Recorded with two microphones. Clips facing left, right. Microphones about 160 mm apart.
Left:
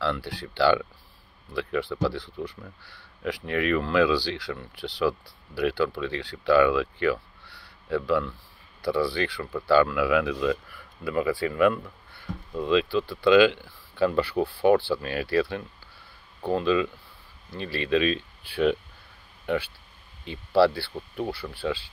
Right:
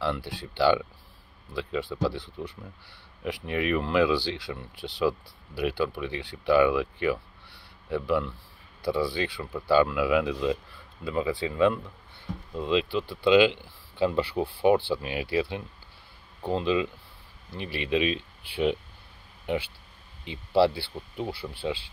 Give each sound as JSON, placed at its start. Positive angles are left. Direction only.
{"t": 0.0, "sound": "speech", "side_deg": -20}